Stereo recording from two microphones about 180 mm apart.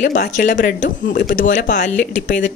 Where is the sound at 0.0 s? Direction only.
50° left (ahead or behind).